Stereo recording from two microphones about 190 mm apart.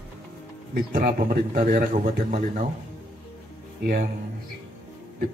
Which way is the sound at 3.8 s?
50° right (ahead or behind).